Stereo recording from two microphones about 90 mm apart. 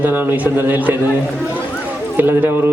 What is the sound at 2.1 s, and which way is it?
Speech, 20° right (ahead or behind).